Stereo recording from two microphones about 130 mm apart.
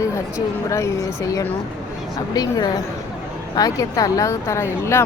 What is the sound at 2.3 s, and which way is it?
A woman's voice, 30° left (ahead or behind).